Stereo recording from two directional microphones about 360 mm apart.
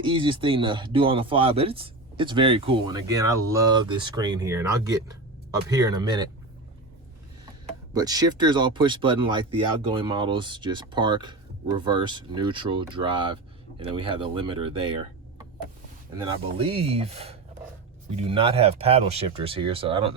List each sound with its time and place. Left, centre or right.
0.0 s speech: centre
7.9 s speech: centre
16.1 s speech: centre